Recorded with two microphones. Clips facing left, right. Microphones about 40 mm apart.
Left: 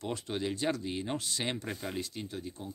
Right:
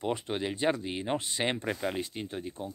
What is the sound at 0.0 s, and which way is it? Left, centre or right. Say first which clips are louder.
Speech: right 3 dB; right.